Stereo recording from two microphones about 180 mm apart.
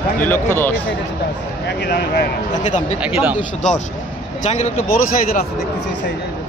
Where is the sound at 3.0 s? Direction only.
5° right (ahead or behind).